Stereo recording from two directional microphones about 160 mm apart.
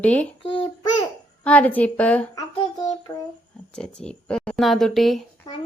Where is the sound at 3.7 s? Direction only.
5° left (ahead or behind).